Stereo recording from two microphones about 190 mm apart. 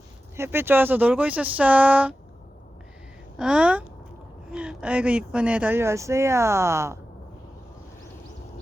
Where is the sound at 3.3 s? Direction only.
5° right (ahead or behind).